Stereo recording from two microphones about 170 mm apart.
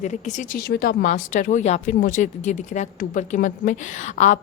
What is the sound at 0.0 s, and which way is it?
Speech, 45° left (ahead or behind).